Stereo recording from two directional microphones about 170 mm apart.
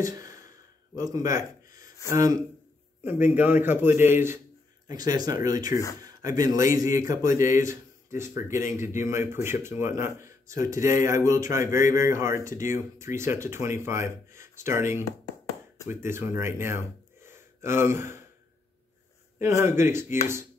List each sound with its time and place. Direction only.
0.0 s a sound: 20° right (ahead or behind)
0.9 s speech: 20° right (ahead or behind)
19.3 s speech: 15° right (ahead or behind)